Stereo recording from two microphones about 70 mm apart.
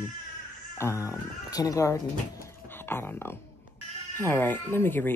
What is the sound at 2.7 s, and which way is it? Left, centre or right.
Speech, left.